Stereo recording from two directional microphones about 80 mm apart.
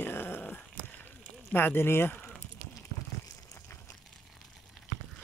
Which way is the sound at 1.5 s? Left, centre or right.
Left.